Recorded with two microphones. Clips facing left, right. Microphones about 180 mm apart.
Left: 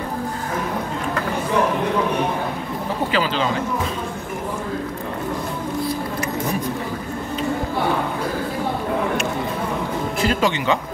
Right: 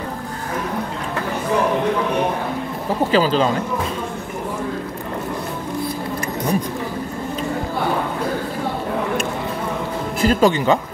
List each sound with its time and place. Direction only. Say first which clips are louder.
3.1 s speech: right 6 dB; 40° right (ahead or behind)
10.2 s speech: right 6 dB; 45° right (ahead or behind)